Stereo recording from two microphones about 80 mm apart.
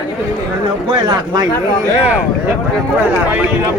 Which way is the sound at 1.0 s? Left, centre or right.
Right.